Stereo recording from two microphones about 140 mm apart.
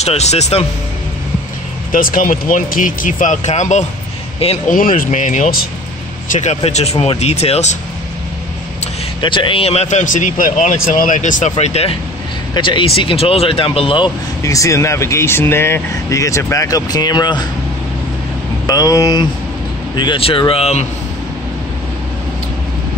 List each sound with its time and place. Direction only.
0.0 s speech: 50° left (ahead or behind)
1.9 s speech: 85° left; by 3.8 s 55° left (ahead or behind)
4.6 s speech: 75° left (ahead or behind)
6.2 s speech: 60° left (ahead or behind)
9.2 s speech: 35° left (ahead or behind); by 11.5 s 65° left (ahead or behind)
11.5 s speech: 45° left (ahead or behind)
14.4 s speech: 25° left (ahead or behind)
18.7 s speech: 25° left (ahead or behind)
20.0 s speech: 40° left (ahead or behind)